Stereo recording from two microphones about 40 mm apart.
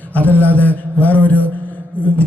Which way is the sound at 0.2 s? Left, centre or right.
Left.